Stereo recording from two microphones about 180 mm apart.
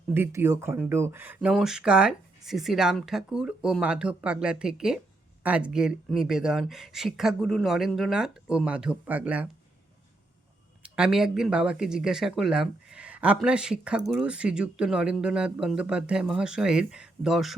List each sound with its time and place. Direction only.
0.1 s speech: 15° right (ahead or behind)
10.8 s speech: 5° right (ahead or behind)